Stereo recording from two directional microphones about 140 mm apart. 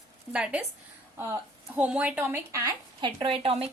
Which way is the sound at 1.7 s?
10° right (ahead or behind).